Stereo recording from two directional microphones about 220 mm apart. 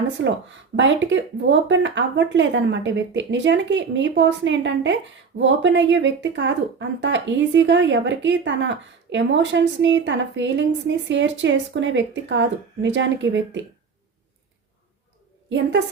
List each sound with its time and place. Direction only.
0.2 s speech: 55° right (ahead or behind)
15.4 s a woman's voice: 55° right (ahead or behind)